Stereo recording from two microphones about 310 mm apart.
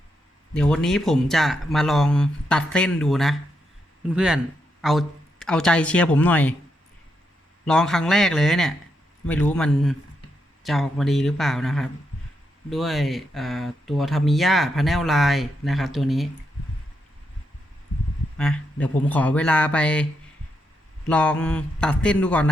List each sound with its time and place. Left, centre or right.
0.5 s speech: centre
7.6 s speech: centre
18.3 s speech: centre
21.1 s speech: centre